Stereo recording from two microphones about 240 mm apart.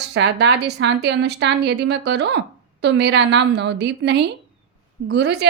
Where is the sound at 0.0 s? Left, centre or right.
Right.